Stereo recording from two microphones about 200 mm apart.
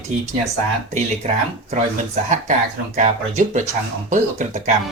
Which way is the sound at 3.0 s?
35° right (ahead or behind).